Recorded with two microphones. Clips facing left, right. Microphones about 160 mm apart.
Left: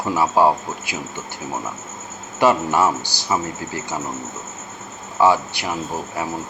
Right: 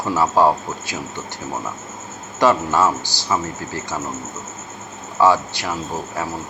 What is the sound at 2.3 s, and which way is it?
Speech, 15° left (ahead or behind).